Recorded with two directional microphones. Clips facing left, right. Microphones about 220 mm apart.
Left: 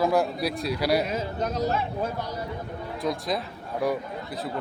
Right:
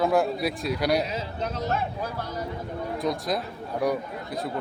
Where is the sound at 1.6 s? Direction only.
35° left (ahead or behind).